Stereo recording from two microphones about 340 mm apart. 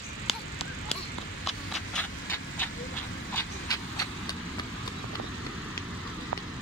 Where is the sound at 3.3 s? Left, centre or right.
Centre.